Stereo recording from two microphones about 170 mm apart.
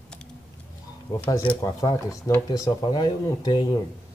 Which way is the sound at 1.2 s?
20° left (ahead or behind).